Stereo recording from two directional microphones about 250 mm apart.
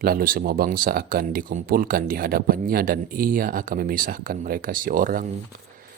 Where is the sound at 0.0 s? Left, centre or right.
Right.